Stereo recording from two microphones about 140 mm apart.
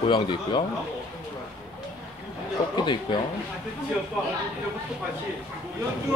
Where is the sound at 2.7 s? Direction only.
35° left (ahead or behind).